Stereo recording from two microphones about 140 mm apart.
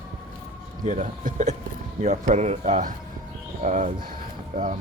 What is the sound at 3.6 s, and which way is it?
Speech, 65° right (ahead or behind).